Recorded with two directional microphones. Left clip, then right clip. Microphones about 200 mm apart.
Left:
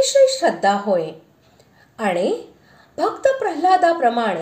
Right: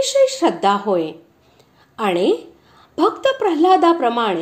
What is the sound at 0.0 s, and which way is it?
A woman's voice, 25° right (ahead or behind).